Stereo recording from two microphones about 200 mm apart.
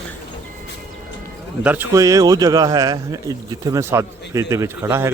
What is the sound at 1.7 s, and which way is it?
Speech, 15° right (ahead or behind).